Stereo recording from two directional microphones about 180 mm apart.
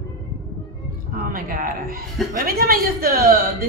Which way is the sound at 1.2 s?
55° right (ahead or behind).